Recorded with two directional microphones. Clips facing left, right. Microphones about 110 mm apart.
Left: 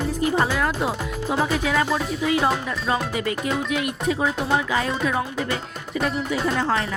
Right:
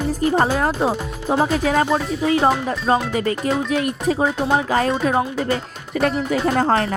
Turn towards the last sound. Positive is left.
turn(degrees=-45)  # may be behind; listen again after turning